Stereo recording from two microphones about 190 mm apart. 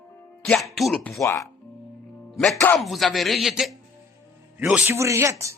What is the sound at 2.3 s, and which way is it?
Speech, centre (ahead or behind).